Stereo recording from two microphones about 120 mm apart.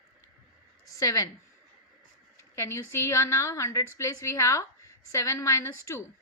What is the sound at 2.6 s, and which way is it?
A woman's voice, 25° left (ahead or behind).